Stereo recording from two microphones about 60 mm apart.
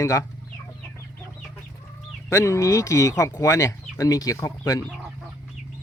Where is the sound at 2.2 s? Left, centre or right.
Left.